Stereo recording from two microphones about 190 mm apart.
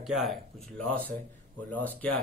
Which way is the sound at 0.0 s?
Centre (ahead or behind).